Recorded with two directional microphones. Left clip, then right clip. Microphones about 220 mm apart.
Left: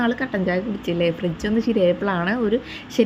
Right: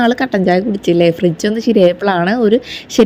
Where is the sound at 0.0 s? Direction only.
25° right (ahead or behind).